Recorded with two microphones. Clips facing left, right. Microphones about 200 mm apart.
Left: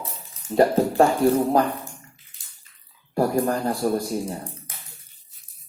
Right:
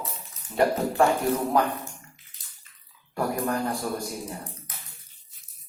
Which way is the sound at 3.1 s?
35° left (ahead or behind).